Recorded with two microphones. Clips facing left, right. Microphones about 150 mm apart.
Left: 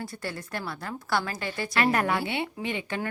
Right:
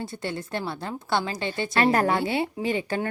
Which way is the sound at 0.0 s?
25° right (ahead or behind).